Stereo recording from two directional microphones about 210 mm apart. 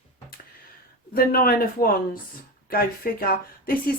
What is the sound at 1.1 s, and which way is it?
A woman's voice, 45° left (ahead or behind).